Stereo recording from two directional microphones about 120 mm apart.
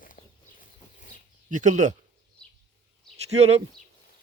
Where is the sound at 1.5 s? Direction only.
90° right.